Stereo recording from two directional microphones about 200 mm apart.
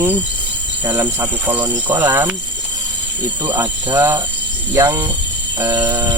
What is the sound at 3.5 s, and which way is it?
Speech, 20° right (ahead or behind).